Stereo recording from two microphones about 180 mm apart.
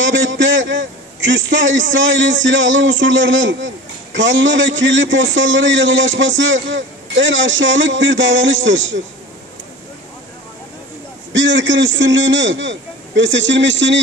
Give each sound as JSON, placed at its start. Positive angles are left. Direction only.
{"t": 0.0, "sound": "a man's voice", "side_deg": -90}
{"t": 11.3, "sound": "a man's voice", "side_deg": -90}